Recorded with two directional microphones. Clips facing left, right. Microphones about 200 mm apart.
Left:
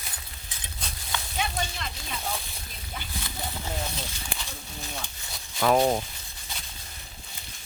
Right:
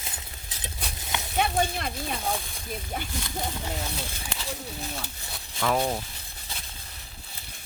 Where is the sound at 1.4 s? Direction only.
55° right (ahead or behind).